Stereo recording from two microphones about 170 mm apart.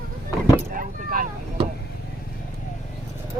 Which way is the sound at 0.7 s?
55° right (ahead or behind).